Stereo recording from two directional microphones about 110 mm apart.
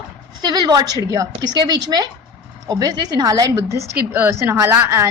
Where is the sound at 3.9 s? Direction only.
15° right (ahead or behind).